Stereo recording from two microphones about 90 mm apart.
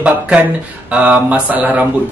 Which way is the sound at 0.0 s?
15° right (ahead or behind).